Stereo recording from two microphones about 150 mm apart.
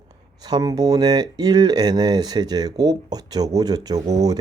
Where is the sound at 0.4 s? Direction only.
25° right (ahead or behind).